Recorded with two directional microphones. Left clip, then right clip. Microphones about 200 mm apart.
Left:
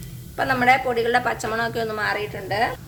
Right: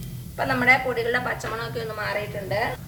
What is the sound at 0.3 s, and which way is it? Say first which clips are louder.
A woman's voice: left 2 dB; 45° left (ahead or behind).